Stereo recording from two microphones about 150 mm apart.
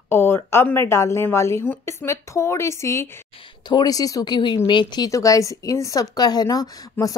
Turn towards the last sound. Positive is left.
turn(degrees=25)  # may be behind; listen again after turning